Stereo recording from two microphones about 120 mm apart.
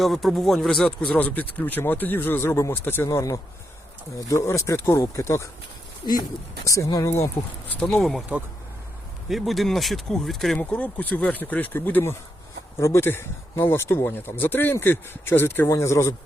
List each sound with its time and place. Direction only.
0.0 s speech: centre (ahead or behind); by 5.5 s 25° left (ahead or behind)
6.7 s speech: 30° left (ahead or behind)
7.7 s speech: 10° left (ahead or behind)
9.3 s speech: centre (ahead or behind)
10.6 s speech: 10° left (ahead or behind)